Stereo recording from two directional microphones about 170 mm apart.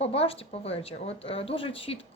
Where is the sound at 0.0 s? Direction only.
35° left (ahead or behind).